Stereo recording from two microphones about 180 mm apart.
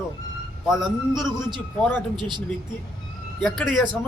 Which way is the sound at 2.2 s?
25° right (ahead or behind).